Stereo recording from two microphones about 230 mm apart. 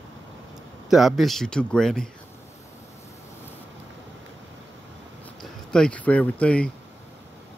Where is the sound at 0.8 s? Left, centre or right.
Centre.